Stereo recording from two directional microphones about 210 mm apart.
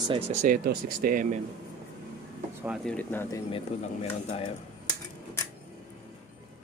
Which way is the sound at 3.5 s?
30° left (ahead or behind).